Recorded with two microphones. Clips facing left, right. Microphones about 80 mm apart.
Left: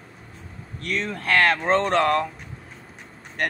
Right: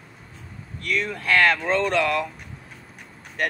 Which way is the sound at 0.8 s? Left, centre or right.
Left.